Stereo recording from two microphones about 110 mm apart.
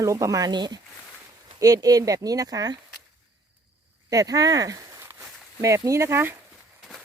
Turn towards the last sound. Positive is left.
turn(degrees=-20)  # may be behind; listen again after turning